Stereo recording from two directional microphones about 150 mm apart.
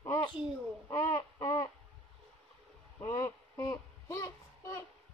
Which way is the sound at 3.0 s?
20° left (ahead or behind).